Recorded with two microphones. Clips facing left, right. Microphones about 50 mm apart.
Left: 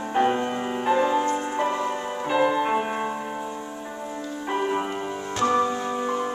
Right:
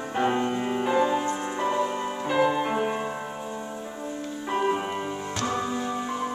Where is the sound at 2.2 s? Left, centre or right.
Centre.